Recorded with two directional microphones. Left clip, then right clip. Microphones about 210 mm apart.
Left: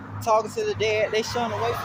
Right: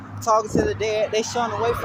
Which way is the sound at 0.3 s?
10° right (ahead or behind).